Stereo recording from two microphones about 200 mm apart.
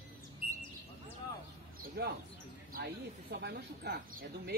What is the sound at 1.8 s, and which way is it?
Basketball bounce, 55° right (ahead or behind).